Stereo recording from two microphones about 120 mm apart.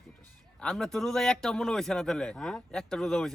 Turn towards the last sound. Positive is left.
turn(degrees=5)  # may be behind; listen again after turning